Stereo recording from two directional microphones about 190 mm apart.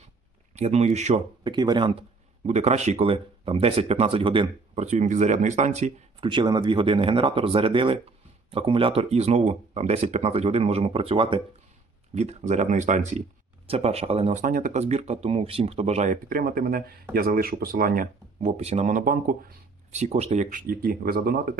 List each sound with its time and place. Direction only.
0.5 s speech: 35° right (ahead or behind)
1.5 s speech: 25° right (ahead or behind); by 19.4 s 45° right (ahead or behind)
19.9 s speech: 35° right (ahead or behind); by 21.6 s 50° right (ahead or behind)